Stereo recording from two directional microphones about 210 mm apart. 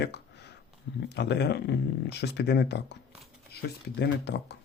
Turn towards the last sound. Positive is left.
turn(degrees=55)  # may be behind; listen again after turning